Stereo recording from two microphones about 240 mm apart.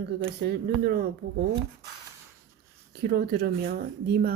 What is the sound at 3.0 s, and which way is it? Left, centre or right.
Speech, right.